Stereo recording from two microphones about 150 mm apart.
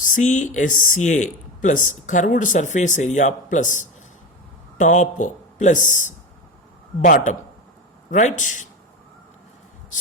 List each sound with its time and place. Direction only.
0.0 s speech: 55° left (ahead or behind)